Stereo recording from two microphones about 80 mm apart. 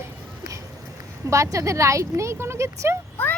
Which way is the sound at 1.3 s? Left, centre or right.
Right.